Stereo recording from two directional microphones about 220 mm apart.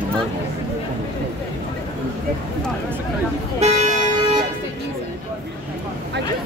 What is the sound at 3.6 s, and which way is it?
Toot, 30° right (ahead or behind).